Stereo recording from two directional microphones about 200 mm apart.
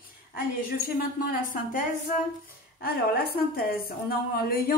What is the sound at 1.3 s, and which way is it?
Speech, 40° left (ahead or behind).